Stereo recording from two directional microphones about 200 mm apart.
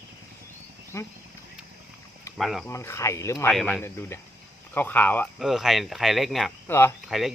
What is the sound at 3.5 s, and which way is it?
Speech, 5° left (ahead or behind).